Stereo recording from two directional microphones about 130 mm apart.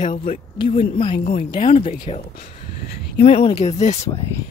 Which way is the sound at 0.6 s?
45° left (ahead or behind).